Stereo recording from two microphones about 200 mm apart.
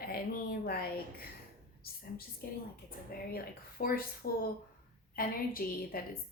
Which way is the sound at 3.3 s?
50° left (ahead or behind).